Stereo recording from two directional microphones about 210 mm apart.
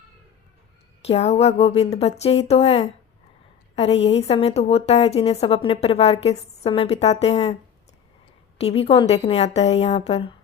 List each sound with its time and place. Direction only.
1.0 s a woman's voice: 30° left (ahead or behind)
8.5 s a woman's voice: 30° left (ahead or behind)